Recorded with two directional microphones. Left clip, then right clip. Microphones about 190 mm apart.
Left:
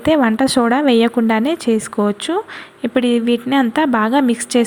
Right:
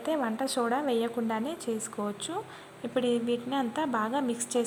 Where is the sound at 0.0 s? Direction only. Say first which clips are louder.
Left 16 dB; 20° left (ahead or behind).